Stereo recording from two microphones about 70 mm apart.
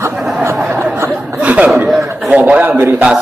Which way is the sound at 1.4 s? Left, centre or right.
Centre.